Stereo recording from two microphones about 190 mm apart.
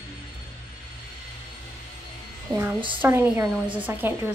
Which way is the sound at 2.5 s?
10° right (ahead or behind).